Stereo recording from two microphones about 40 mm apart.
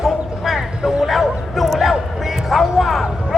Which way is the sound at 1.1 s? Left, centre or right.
Centre.